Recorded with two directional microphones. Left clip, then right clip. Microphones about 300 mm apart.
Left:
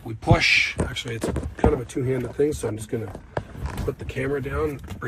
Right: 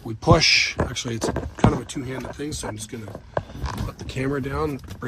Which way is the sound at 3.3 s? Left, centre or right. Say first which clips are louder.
Right 4 dB; centre.